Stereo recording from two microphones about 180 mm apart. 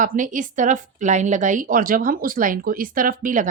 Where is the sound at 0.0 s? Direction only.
45° right (ahead or behind).